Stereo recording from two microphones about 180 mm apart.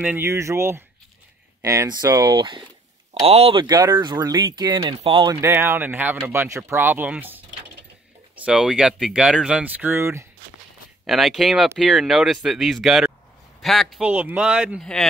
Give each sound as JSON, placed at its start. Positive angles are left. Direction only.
{"t": 0.0, "sound": "speech", "side_deg": -10}
{"t": 11.1, "sound": "speech", "side_deg": 0}